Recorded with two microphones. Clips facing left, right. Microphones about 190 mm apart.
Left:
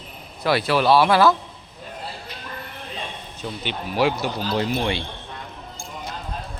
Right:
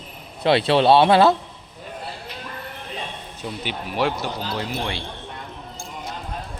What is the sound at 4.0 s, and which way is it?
Speech, 10° left (ahead or behind).